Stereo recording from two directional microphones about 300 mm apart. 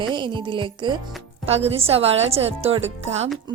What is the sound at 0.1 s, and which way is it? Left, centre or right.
Speech, centre.